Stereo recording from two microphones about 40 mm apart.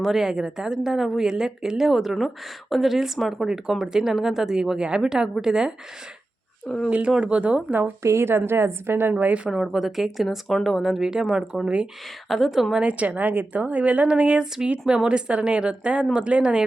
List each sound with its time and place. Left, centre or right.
0.0 s speech: centre
0.9 s a woman's voice: centre
6.7 s speech: centre
7.2 s a woman's voice: right
8.4 s a woman's voice: right
9.1 s a woman's voice: right
9.5 s a woman's voice: centre
11.0 s speech: centre
12.3 s a woman's voice: centre
12.8 s a woman's voice: right